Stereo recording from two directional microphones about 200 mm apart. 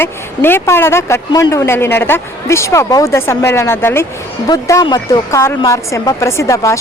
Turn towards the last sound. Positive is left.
turn(degrees=15)  # may be behind; listen again after turning